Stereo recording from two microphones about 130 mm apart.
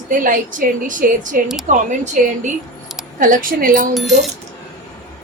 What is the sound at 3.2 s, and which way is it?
Speech, 90° right.